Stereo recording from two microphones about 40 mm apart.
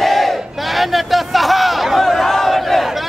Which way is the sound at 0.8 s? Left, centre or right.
Centre.